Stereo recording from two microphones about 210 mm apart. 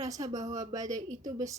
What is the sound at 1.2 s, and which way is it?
Speech, 15° right (ahead or behind).